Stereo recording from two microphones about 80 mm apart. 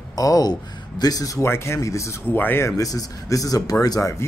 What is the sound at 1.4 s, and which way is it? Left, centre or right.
Speech, left.